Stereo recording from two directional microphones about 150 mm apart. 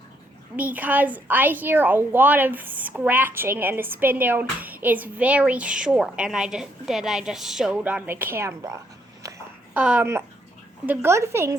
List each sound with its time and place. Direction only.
0.5 s a woman's voice: 10° right (ahead or behind)
9.2 s a sound: 25° right (ahead or behind)
9.7 s a woman's voice: 10° right (ahead or behind)